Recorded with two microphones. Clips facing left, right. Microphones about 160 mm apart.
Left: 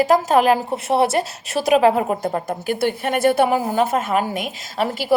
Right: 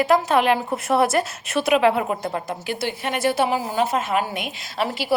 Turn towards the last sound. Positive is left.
turn(degrees=45)  # may be behind; listen again after turning